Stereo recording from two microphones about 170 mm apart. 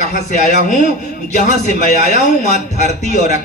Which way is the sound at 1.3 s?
45° left (ahead or behind).